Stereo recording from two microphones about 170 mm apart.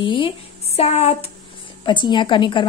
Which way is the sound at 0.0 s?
30° left (ahead or behind).